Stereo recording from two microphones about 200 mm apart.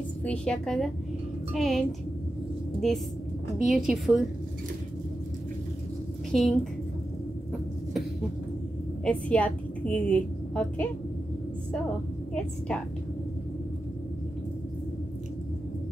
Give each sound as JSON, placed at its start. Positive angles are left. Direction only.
{"t": 0.2, "sound": "a woman's voice", "side_deg": 5}
{"t": 6.3, "sound": "a woman's voice", "side_deg": 5}
{"t": 9.0, "sound": "a woman's voice", "side_deg": 5}
{"t": 12.4, "sound": "a woman's voice", "side_deg": 5}